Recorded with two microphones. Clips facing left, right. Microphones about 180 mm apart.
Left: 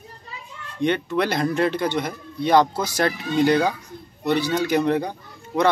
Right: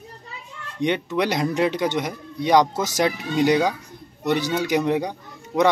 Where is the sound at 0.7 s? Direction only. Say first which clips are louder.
Left 1 dB; 15° right (ahead or behind).